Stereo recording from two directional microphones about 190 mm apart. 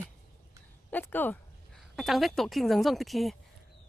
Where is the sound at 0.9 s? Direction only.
10° left (ahead or behind).